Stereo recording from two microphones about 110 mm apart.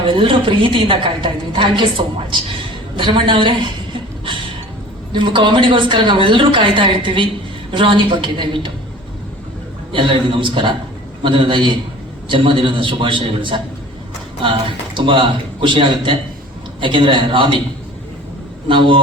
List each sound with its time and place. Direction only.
0.1 s a woman's voice: 50° right (ahead or behind)
5.1 s a woman's voice: 45° right (ahead or behind)
9.9 s a woman's voice: 50° right (ahead or behind)
14.9 s a woman's voice: 50° right (ahead or behind)
18.7 s a woman's voice: 50° right (ahead or behind)